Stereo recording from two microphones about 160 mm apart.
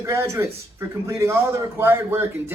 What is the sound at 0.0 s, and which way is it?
A man's voice, 20° right (ahead or behind).